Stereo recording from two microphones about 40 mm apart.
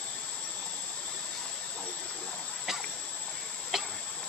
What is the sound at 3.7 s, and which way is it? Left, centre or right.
Tick-tock, centre.